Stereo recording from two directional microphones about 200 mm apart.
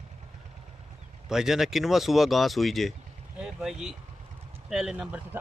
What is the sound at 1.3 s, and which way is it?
Speech, centre (ahead or behind).